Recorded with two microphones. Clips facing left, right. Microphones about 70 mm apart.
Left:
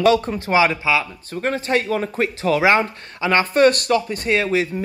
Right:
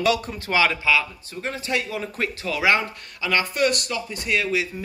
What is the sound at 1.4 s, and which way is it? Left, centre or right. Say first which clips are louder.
Speech: left 6 dB; left.